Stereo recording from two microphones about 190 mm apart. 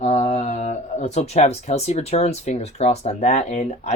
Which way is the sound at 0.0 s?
35° left (ahead or behind).